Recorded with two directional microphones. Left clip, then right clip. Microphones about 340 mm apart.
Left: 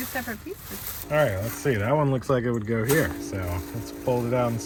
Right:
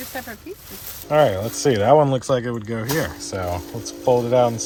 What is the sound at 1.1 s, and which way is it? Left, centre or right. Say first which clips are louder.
Speech: right 7 dB; right.